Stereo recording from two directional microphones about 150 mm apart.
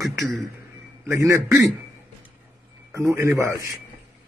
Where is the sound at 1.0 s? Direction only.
20° right (ahead or behind).